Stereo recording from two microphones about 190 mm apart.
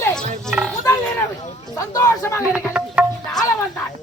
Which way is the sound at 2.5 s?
5° right (ahead or behind).